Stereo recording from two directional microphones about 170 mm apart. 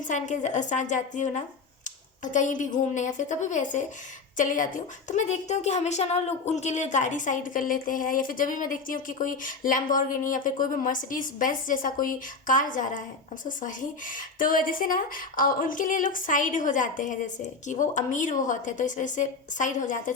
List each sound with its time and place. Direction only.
0.1 s a woman's voice: 45° left (ahead or behind)